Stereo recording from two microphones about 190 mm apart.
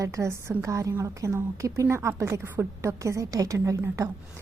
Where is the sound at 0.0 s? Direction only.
15° right (ahead or behind).